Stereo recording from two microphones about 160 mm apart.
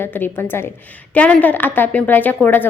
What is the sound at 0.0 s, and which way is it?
A woman's voice, 10° left (ahead or behind).